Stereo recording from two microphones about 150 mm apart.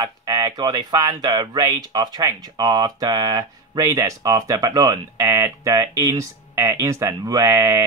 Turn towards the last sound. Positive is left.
turn(degrees=-20)  # may be behind; listen again after turning